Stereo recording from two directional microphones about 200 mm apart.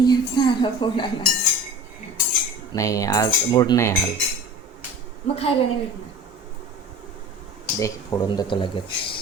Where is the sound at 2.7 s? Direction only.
15° left (ahead or behind).